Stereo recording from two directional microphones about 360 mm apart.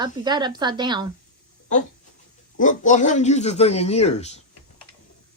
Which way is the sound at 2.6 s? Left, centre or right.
Left.